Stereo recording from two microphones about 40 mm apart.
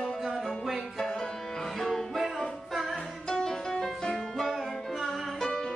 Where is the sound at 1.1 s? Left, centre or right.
Centre.